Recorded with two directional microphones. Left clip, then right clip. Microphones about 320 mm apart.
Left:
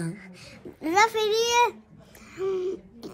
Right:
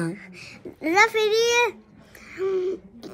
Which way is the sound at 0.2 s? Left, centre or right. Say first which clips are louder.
Right 4 dB; centre.